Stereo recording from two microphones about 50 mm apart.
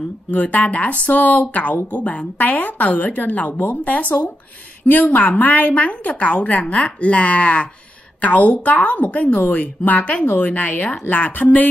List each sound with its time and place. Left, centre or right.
0.3 s a woman's voice: left